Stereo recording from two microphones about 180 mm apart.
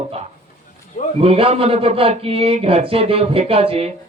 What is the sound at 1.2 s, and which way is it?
Speech, 35° right (ahead or behind).